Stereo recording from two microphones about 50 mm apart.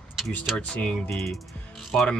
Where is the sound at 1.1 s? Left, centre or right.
Centre.